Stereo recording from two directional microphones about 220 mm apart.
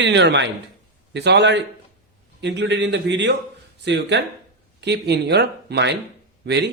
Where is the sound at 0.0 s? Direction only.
55° right (ahead or behind).